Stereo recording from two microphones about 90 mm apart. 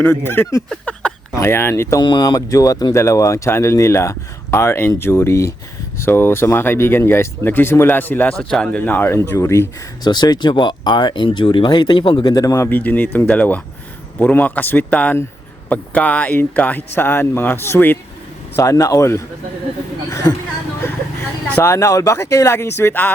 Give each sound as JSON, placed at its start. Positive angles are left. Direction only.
{"t": 0.0, "sound": "speech", "side_deg": 25}
{"t": 2.0, "sound": "speech", "side_deg": 55}
{"t": 8.3, "sound": "speech", "side_deg": 5}
{"t": 10.0, "sound": "speech", "side_deg": 50}
{"t": 12.2, "sound": "speech", "side_deg": 45}
{"t": 12.6, "sound": "speech", "side_deg": 20}
{"t": 18.5, "sound": "speech", "side_deg": 35}
{"t": 21.6, "sound": "speech", "side_deg": 35}